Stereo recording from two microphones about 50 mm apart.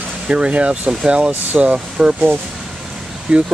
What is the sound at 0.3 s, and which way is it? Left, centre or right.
Speech, right.